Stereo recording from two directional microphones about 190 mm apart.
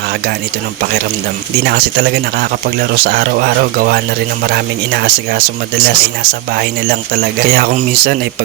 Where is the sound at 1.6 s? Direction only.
60° right (ahead or behind).